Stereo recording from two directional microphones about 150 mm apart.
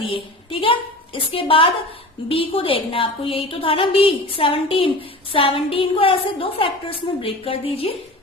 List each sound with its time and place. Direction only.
0.0 s a woman's voice: 35° left (ahead or behind)